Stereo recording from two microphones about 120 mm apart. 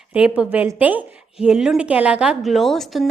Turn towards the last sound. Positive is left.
turn(degrees=0)  # may be behind; listen again after turning